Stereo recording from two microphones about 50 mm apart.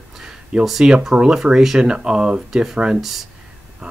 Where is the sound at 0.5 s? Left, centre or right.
Centre.